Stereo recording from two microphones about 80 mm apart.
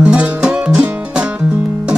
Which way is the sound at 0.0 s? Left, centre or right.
Centre.